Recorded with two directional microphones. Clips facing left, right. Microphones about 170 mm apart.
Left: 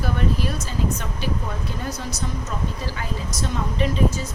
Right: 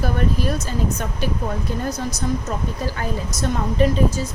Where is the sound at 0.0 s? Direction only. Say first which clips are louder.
Right 2 dB; 45° right (ahead or behind).